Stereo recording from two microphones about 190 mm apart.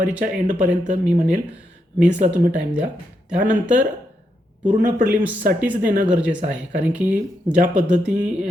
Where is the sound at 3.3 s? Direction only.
40° right (ahead or behind).